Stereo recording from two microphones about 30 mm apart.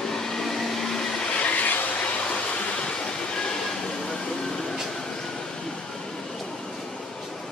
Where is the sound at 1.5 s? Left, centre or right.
Left.